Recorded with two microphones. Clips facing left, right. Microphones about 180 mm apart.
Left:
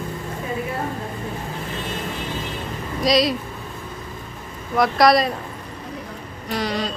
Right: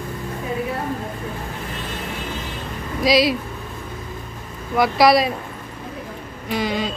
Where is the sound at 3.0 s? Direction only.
5° right (ahead or behind).